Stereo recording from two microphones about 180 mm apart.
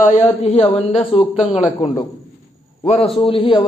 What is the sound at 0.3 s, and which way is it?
Speech, 35° left (ahead or behind).